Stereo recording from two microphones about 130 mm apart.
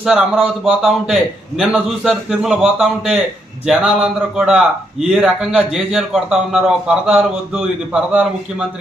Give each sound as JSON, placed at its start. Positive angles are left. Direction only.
{"t": 0.0, "sound": "a man's voice", "side_deg": -5}